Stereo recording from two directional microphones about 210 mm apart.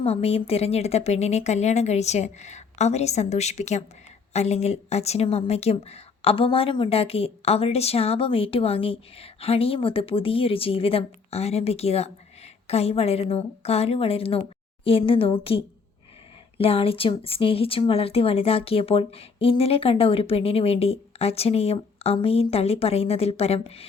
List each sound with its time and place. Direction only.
0.0 s a woman's voice: 30° left (ahead or behind)